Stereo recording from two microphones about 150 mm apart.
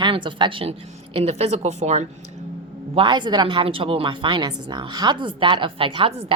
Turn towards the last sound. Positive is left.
turn(degrees=-35)  # may be behind; listen again after turning